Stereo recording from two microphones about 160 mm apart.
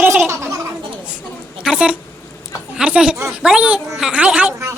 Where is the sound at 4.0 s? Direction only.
5° right (ahead or behind).